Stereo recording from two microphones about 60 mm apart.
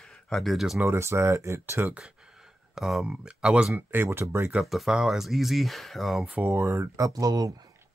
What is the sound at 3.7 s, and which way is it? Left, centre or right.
Speech, right.